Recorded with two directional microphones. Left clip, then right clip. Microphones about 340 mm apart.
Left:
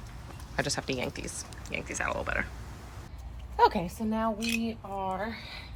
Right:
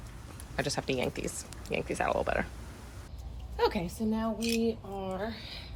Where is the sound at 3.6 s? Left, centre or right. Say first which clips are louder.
Left 5 dB; centre.